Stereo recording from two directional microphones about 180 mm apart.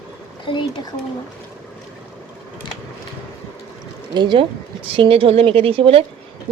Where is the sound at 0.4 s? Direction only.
25° left (ahead or behind).